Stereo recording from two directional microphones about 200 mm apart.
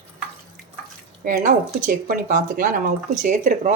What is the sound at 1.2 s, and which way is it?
Speech, 40° right (ahead or behind).